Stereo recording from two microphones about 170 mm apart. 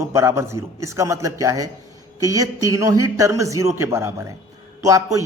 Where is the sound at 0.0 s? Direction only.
15° right (ahead or behind).